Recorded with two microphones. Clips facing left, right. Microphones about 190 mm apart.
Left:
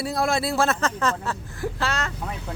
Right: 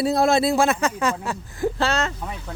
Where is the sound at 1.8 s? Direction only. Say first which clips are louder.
Right 4 dB; 25° right (ahead or behind).